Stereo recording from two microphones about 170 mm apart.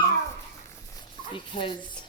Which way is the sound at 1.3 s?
30° left (ahead or behind).